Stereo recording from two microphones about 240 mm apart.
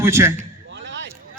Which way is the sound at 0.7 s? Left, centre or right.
Right.